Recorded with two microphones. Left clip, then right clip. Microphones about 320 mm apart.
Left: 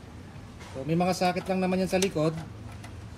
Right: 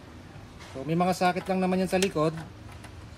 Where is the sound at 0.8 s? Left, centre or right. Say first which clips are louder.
Right 1 dB; centre.